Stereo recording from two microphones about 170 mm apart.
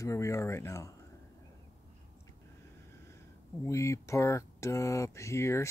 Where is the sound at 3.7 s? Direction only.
15° left (ahead or behind).